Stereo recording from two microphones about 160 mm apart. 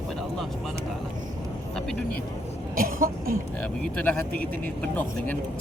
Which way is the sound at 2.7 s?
60° right (ahead or behind).